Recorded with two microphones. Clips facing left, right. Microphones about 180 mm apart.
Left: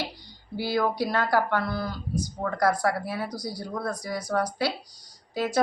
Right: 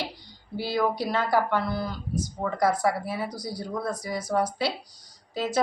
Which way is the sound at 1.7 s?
25° right (ahead or behind).